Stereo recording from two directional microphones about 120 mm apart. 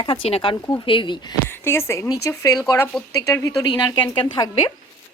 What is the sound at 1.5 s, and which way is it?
Speech, 20° left (ahead or behind).